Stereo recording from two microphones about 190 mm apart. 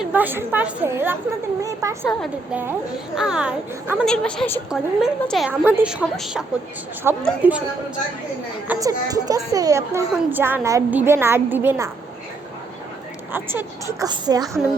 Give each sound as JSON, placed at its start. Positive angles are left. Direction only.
{"t": 0.0, "sound": "a woman's voice", "side_deg": -10}
{"t": 2.0, "sound": "a woman's voice", "side_deg": 0}
{"t": 8.6, "sound": "a woman's voice", "side_deg": -15}
{"t": 13.3, "sound": "a woman's voice", "side_deg": -10}